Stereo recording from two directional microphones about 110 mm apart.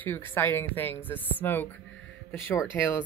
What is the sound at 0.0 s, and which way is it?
Speech, 20° left (ahead or behind).